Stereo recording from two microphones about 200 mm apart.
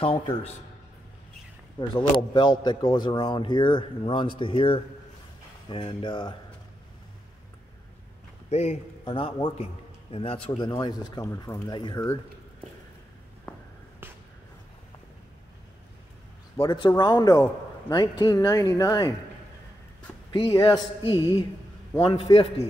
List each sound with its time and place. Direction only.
0.0 s a man's voice: 30° left (ahead or behind)
1.8 s a man's voice: 25° left (ahead or behind)
8.5 s a man's voice: 35° left (ahead or behind)
13.5 s a sound: 5° left (ahead or behind)
16.5 s a man's voice: 25° left (ahead or behind)
20.3 s a man's voice: 20° left (ahead or behind)